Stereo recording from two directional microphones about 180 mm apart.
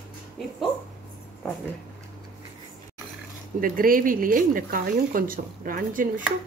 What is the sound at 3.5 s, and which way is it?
Speech, 50° right (ahead or behind).